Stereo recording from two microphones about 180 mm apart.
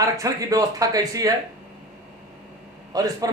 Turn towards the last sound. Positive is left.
turn(degrees=-20)  # may be behind; listen again after turning